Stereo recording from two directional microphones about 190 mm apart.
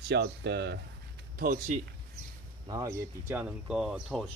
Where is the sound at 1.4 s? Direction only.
45° right (ahead or behind).